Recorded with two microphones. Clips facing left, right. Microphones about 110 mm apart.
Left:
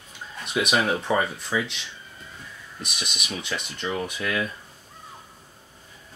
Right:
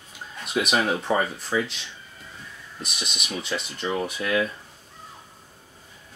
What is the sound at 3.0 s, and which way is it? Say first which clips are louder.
Speech: even; centre (ahead or behind).